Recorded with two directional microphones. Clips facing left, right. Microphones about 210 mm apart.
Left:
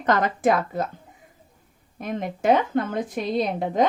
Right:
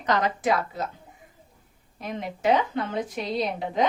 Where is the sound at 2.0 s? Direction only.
50° left (ahead or behind).